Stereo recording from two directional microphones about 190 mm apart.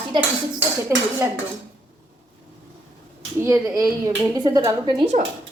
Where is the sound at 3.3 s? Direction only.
15° right (ahead or behind).